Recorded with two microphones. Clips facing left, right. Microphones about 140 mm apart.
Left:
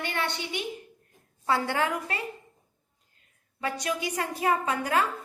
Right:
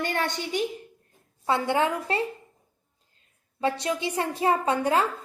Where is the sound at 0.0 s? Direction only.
40° right (ahead or behind).